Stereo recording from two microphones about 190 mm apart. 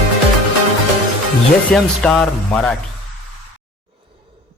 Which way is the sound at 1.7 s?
Centre (ahead or behind).